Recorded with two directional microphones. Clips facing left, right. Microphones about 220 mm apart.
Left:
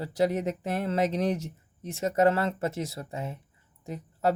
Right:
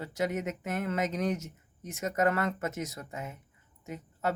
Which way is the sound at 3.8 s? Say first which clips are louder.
Left 5 dB; 35° left (ahead or behind).